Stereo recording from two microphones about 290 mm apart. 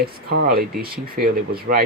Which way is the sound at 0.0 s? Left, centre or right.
Right.